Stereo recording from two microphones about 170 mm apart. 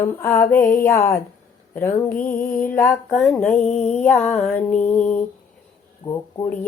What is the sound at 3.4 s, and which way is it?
Speech, 10° left (ahead or behind).